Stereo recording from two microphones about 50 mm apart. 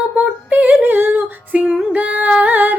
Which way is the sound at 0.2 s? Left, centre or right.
Right.